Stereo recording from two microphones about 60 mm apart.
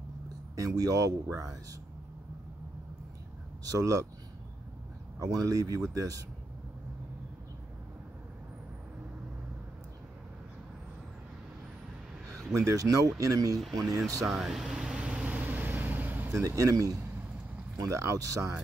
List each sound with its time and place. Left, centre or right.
0.6 s speech: right
3.6 s speech: right
5.2 s speech: right
5.9 s speech: right
12.5 s speech: right
14.2 s air conditioning: centre
15.2 s vehicle: right
16.3 s speech: right